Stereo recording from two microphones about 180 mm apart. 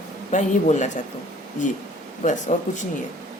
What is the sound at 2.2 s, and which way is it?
Speech, 40° left (ahead or behind).